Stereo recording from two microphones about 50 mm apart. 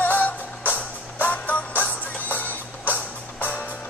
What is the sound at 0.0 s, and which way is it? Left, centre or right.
Music, left.